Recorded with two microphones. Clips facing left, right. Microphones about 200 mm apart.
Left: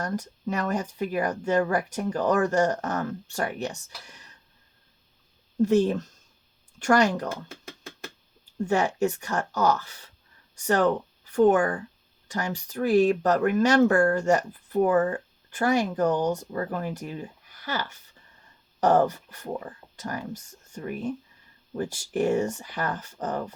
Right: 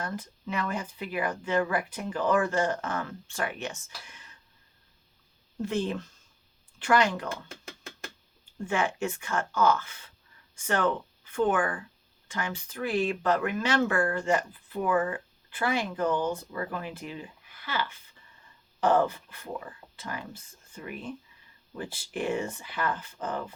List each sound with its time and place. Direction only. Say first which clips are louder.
0.0 s speech: left 5 dB; 45° left (ahead or behind)
5.6 s speech: left 8 dB; 45° left (ahead or behind)
8.6 s speech: left 5 dB; 40° left (ahead or behind)